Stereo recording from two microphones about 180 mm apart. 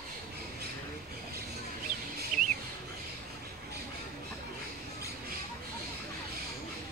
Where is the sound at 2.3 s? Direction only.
45° right (ahead or behind).